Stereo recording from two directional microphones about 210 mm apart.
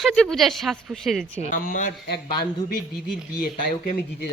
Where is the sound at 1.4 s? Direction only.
40° left (ahead or behind).